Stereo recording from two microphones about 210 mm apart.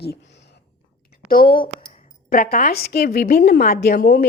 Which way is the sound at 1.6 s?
40° left (ahead or behind).